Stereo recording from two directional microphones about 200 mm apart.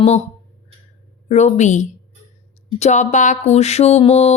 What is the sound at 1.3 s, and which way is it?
Speech, 35° left (ahead or behind).